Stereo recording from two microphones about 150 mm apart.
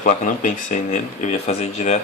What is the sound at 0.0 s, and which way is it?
Speech, 60° left (ahead or behind).